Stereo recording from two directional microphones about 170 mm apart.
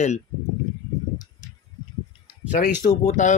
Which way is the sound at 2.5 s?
50° left (ahead or behind).